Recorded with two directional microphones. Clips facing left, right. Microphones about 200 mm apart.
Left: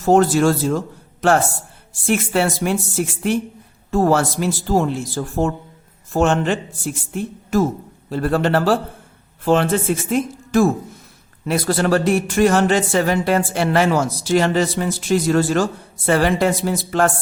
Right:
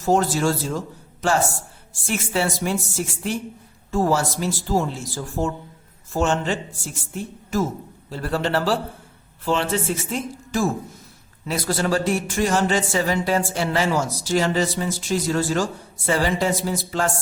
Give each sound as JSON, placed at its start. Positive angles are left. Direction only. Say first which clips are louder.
{"t": 0.0, "sound": "speech", "louder": "left 6 dB", "side_deg": 60}
{"t": 1.9, "sound": "speech", "louder": "left 7 dB", "side_deg": 60}